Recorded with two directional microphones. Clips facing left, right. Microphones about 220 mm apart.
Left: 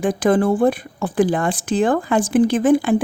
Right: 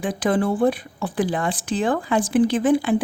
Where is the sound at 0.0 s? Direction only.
45° left (ahead or behind).